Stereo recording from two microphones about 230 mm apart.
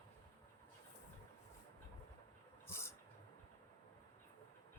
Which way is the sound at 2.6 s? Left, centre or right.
Centre.